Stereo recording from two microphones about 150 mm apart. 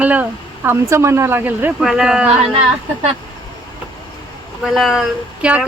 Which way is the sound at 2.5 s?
40° right (ahead or behind).